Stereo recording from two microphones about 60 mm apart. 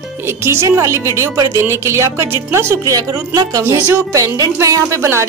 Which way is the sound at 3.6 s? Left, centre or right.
Right.